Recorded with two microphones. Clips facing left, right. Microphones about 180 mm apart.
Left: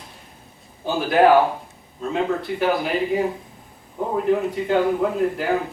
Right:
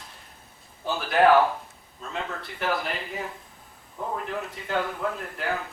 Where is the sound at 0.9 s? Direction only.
Centre (ahead or behind).